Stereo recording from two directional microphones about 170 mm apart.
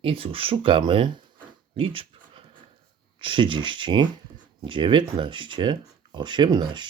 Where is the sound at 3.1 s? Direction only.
30° right (ahead or behind).